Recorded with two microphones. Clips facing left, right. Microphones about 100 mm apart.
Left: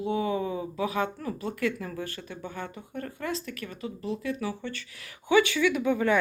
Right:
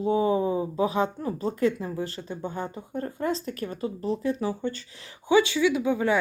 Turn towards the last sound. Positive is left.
turn(degrees=-15)  # may be behind; listen again after turning